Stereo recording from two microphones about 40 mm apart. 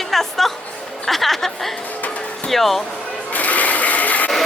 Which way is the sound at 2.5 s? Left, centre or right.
Centre.